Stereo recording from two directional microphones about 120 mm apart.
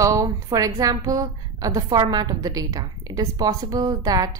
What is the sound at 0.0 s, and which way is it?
A woman's voice, 30° right (ahead or behind).